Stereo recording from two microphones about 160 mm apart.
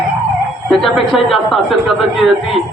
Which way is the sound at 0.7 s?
Centre (ahead or behind).